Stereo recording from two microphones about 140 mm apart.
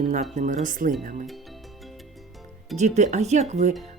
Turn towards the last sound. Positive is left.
turn(degrees=-55)  # may be behind; listen again after turning